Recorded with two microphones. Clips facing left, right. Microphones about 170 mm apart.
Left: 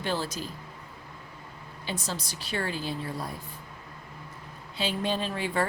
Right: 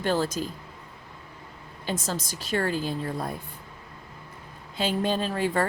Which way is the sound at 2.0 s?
45° right (ahead or behind).